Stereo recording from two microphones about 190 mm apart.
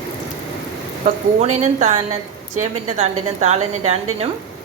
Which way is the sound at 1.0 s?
40° right (ahead or behind).